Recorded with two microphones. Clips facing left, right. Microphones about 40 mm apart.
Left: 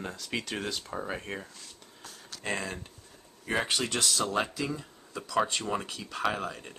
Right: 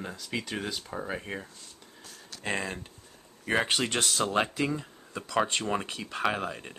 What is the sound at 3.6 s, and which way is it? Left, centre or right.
Speech, right.